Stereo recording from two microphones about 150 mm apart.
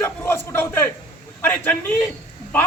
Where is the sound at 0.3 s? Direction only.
15° left (ahead or behind).